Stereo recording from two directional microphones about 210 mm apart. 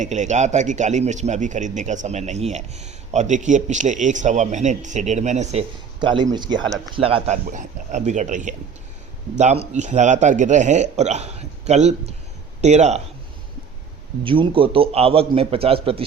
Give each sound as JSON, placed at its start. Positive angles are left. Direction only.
{"t": 0.0, "sound": "a man's voice", "side_deg": -35}
{"t": 7.4, "sound": "a man's voice", "side_deg": -40}
{"t": 14.3, "sound": "a man's voice", "side_deg": -25}